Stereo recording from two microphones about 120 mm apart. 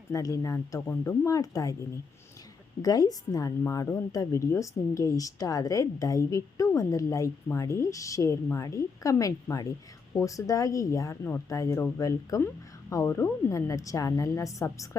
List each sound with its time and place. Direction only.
0.1 s speech: 30° left (ahead or behind)
2.8 s a woman's voice: 30° left (ahead or behind)